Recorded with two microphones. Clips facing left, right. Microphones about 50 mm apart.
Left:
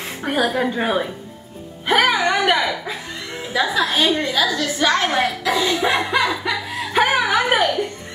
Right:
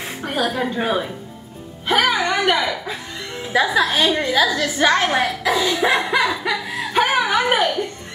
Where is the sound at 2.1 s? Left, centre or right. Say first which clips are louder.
Left 1 dB; left.